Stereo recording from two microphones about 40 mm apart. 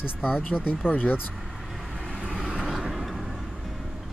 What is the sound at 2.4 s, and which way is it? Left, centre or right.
Vehicle, centre.